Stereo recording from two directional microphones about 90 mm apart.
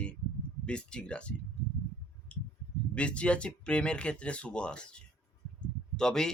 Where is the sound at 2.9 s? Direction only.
15° left (ahead or behind).